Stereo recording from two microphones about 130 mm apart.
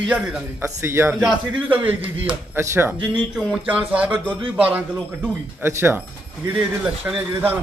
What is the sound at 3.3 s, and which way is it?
A man's voice, 5° right (ahead or behind).